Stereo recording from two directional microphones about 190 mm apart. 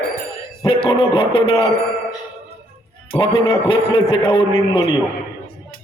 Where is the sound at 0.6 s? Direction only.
25° left (ahead or behind).